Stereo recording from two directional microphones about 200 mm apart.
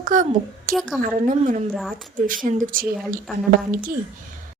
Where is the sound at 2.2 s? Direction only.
40° right (ahead or behind).